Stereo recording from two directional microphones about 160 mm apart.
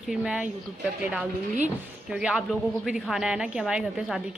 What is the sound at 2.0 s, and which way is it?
A woman's voice, 5° right (ahead or behind).